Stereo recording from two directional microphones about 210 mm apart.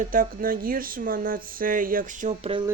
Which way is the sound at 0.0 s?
40° right (ahead or behind).